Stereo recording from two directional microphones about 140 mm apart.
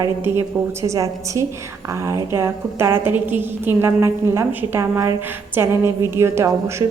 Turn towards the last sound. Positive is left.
turn(degrees=-20)  # may be behind; listen again after turning